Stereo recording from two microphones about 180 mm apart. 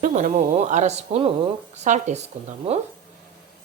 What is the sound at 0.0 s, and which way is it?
Dishes, 45° right (ahead or behind).